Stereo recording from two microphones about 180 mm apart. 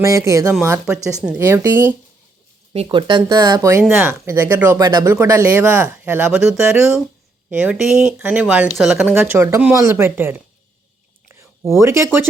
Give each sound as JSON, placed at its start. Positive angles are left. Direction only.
{"t": 0.0, "sound": "speech", "side_deg": -15}
{"t": 2.7, "sound": "speech", "side_deg": -25}
{"t": 11.3, "sound": "a sound", "side_deg": -15}